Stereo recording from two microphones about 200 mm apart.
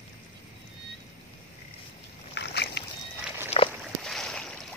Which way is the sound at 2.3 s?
55° left (ahead or behind).